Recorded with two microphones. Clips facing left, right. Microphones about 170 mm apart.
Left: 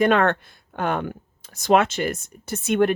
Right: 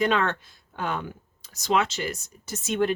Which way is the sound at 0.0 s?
55° left (ahead or behind).